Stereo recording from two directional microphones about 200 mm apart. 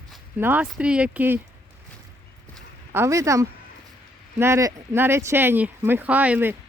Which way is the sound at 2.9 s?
15° right (ahead or behind).